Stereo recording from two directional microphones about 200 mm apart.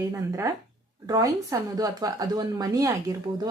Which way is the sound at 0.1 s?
15° right (ahead or behind).